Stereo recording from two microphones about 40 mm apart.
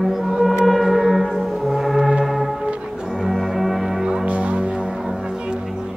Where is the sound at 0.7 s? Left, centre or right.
Centre.